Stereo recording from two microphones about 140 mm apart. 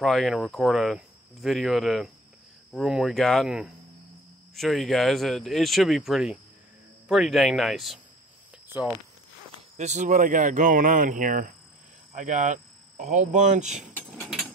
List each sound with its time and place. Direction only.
0.0 s speech: centre (ahead or behind)
9.8 s speech: 55° right (ahead or behind); by 11.5 s 70° right (ahead or behind)
12.1 s cricket: 60° right (ahead or behind)
14.1 s a sound: centre (ahead or behind)